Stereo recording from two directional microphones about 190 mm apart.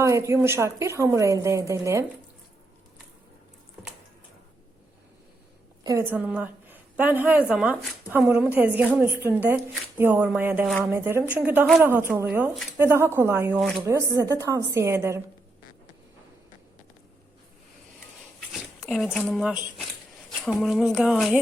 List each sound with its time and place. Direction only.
0.0 s speech: 15° right (ahead or behind)
5.8 s a woman's voice: 15° right (ahead or behind)
11.9 s speech: 10° right (ahead or behind)
13.6 s speech: 5° left (ahead or behind)
13.8 s speech: 15° right (ahead or behind)
18.3 s a sound: centre (ahead or behind)
19.2 s speech: centre (ahead or behind)